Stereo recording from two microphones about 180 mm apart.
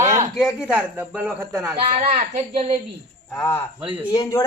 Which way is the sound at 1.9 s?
40° right (ahead or behind).